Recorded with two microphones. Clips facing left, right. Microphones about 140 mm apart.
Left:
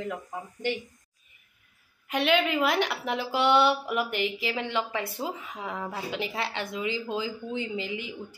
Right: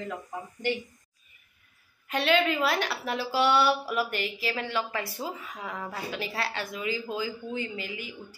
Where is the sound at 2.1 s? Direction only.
15° left (ahead or behind).